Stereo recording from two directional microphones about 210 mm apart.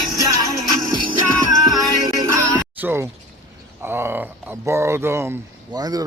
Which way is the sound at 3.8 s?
10° right (ahead or behind).